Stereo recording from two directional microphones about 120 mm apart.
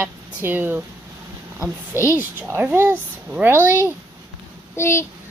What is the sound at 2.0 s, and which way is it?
Speech, 25° left (ahead or behind).